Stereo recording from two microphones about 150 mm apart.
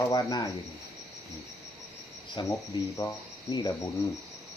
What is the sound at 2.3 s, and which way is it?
Speech, 30° left (ahead or behind).